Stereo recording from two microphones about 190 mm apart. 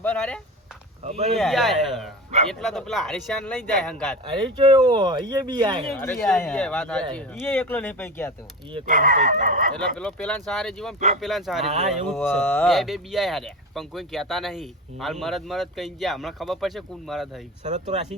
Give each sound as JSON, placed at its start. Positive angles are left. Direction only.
{"t": 0.0, "sound": "a sound", "side_deg": 5}
{"t": 1.0, "sound": "speech", "side_deg": -35}
{"t": 1.4, "sound": "speech", "side_deg": 0}
{"t": 4.6, "sound": "speech", "side_deg": -25}
{"t": 5.8, "sound": "speech", "side_deg": 0}
{"t": 8.9, "sound": "speech", "side_deg": -45}
{"t": 10.0, "sound": "speech", "side_deg": 5}
{"t": 11.6, "sound": "speech", "side_deg": -35}
{"t": 11.9, "sound": "speech", "side_deg": 5}
{"t": 17.7, "sound": "speech", "side_deg": -40}